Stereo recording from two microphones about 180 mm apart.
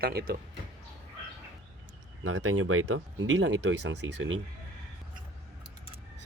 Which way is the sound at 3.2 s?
80° right.